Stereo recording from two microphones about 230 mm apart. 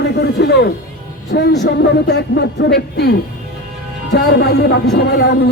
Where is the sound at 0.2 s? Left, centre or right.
Left.